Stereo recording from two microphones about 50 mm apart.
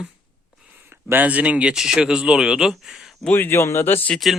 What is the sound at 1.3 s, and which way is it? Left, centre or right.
Speech, right.